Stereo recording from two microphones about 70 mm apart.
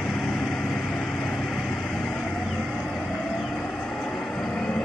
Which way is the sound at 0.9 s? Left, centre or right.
Left.